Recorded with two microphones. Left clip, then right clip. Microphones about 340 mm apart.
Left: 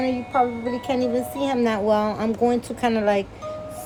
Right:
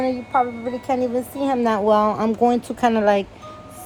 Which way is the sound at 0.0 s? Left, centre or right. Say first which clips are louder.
Right 1 dB; centre.